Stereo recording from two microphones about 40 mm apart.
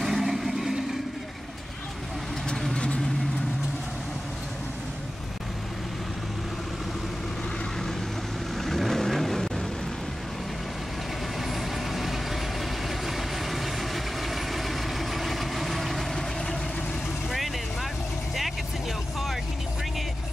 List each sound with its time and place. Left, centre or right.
0.0 s vehicle: centre
2.7 s vehicle: left
8.5 s vehicle: centre
11.4 s vehicle: centre